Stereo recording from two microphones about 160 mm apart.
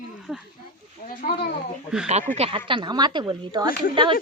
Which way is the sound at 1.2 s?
60° left (ahead or behind).